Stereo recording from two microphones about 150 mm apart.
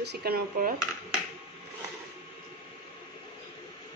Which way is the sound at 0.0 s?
90° right.